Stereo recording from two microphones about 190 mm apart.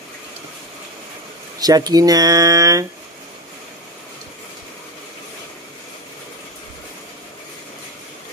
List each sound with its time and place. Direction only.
1.6 s speech: 20° right (ahead or behind)